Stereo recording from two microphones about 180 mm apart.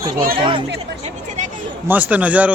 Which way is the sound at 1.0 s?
40° right (ahead or behind).